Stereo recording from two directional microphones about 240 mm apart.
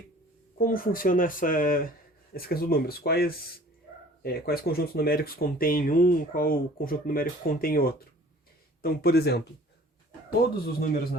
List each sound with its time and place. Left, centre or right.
0.6 s speech: left
10.7 s speech: left